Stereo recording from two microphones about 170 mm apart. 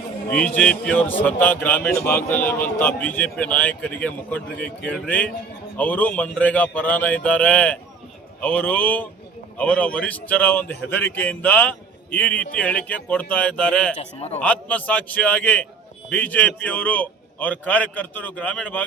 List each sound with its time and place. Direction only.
0.3 s speech: 5° left (ahead or behind)
13.9 s a man's voice: 40° left (ahead or behind)
14.4 s speech: 10° left (ahead or behind)